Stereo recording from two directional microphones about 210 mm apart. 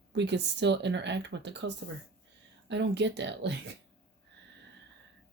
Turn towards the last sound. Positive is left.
turn(degrees=-55)  # may be behind; listen again after turning